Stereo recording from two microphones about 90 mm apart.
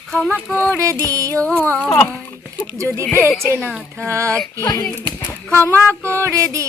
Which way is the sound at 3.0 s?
25° left (ahead or behind).